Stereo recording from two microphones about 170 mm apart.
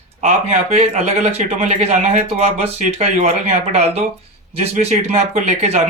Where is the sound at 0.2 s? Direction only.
40° right (ahead or behind).